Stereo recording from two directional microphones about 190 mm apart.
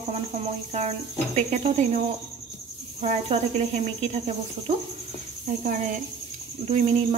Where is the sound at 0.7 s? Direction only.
35° right (ahead or behind).